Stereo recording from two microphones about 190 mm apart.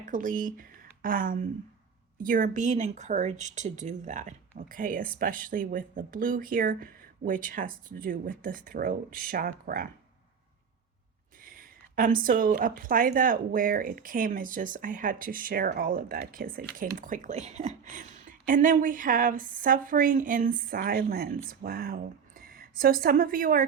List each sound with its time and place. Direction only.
0.0 s speech: 45° right (ahead or behind)
11.3 s speech: 50° right (ahead or behind)